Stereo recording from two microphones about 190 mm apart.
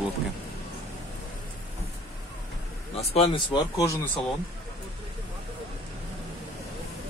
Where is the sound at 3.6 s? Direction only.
20° left (ahead or behind).